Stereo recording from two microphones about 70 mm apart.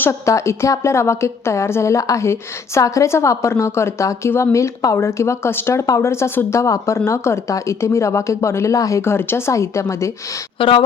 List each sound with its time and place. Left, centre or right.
0.1 s speech: left
4.9 s speech: left
9.0 s speech: left